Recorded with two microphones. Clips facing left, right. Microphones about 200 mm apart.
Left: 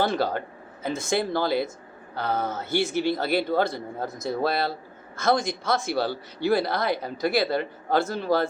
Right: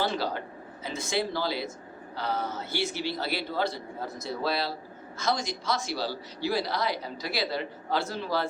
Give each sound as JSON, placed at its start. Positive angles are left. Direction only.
{"t": 0.0, "sound": "a man's voice", "side_deg": 50}